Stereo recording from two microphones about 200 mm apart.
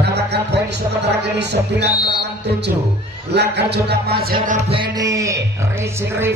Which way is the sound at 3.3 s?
55° right (ahead or behind).